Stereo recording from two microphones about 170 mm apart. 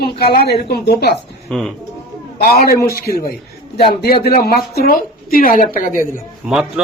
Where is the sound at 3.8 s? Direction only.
65° left (ahead or behind).